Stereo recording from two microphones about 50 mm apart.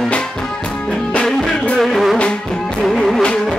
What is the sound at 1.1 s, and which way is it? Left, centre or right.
Music, centre.